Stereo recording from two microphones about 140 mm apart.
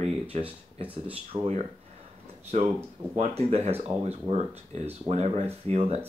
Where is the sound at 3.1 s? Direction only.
50° right (ahead or behind).